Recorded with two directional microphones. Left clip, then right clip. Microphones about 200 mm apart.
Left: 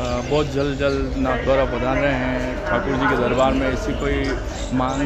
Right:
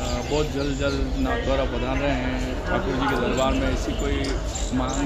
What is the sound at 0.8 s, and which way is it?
Speech, 45° left (ahead or behind).